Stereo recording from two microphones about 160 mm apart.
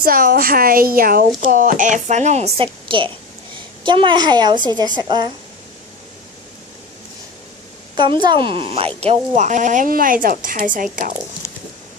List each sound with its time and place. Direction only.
0.0 s a woman's voice: 65° right (ahead or behind); by 5.3 s 25° right (ahead or behind)
7.9 s speech: 30° right (ahead or behind); by 10.8 s 55° right (ahead or behind)